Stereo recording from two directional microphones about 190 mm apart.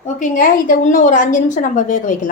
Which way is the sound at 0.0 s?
45° left (ahead or behind).